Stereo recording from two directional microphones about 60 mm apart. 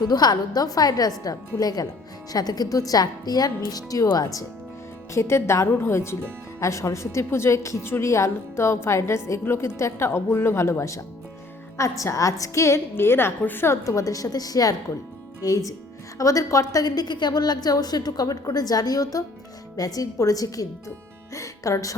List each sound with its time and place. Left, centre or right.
0.1 s a woman's voice: left
5.1 s a woman's voice: left
6.6 s a woman's voice: left
13.8 s a woman's voice: left
15.4 s a woman's voice: left
21.3 s speech: left